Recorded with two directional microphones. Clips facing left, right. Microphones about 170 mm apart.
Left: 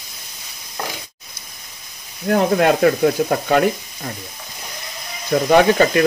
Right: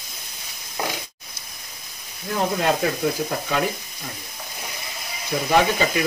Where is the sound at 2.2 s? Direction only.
65° left (ahead or behind).